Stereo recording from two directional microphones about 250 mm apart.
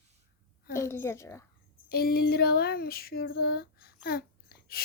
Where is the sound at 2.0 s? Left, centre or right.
Left.